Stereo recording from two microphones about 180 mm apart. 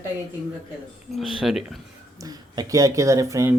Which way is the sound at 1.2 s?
Centre (ahead or behind).